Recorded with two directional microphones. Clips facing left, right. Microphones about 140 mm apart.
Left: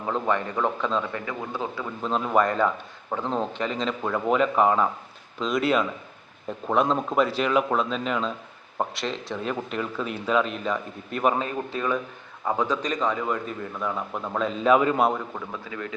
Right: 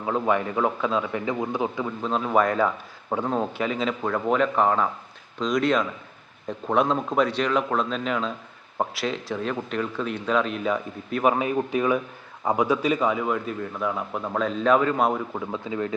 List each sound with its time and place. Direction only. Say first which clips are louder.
0.0 s speech: right 2 dB; 10° right (ahead or behind)
1.2 s speech: right 5 dB; 20° right (ahead or behind)
2.0 s a man's voice: even; centre (ahead or behind)
11.3 s a man's voice: right 5 dB; 15° right (ahead or behind); by 15.0 s 10° left (ahead or behind)
15.4 s speech: right 6 dB; 25° right (ahead or behind)